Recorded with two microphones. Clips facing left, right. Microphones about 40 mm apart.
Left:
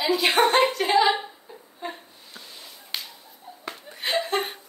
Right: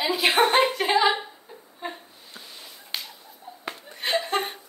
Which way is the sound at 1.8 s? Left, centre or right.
Centre.